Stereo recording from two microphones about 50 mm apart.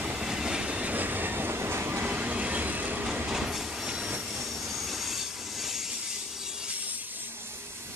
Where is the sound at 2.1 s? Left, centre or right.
Right.